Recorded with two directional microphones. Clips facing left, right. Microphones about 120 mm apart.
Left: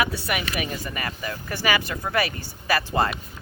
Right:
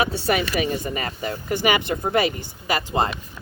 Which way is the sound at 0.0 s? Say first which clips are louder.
Right 4 dB; 25° right (ahead or behind).